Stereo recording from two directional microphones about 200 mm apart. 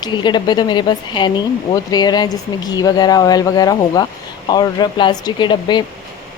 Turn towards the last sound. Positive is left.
turn(degrees=20)  # may be behind; listen again after turning